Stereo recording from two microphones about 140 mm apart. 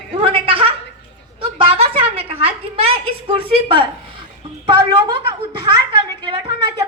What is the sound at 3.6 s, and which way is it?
A woman's voice, 40° right (ahead or behind).